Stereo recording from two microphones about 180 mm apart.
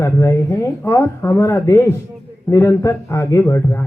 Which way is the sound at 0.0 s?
15° left (ahead or behind).